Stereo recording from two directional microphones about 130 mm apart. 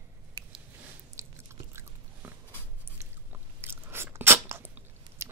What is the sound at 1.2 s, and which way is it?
Biting, 20° right (ahead or behind).